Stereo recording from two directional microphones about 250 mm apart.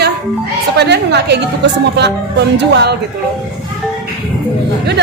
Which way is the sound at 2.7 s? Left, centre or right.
Right.